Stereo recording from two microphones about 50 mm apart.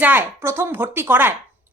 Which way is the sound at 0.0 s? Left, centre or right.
Right.